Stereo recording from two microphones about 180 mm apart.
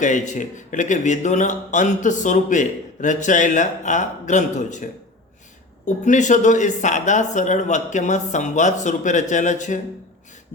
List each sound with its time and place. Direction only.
0.0 s speech: 45° left (ahead or behind)